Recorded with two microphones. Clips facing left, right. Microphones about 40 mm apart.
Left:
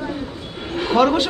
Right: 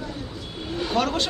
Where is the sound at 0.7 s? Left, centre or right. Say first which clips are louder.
Left 6 dB; left.